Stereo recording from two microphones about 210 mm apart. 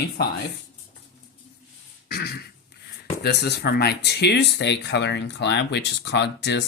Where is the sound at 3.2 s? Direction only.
50° left (ahead or behind).